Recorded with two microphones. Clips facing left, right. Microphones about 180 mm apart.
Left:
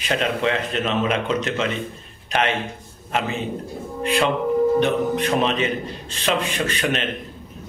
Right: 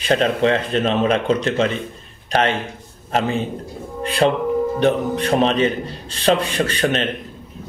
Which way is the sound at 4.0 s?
35° right (ahead or behind).